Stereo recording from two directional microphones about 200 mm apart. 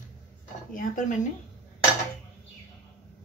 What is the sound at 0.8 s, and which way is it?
Speech, 40° left (ahead or behind).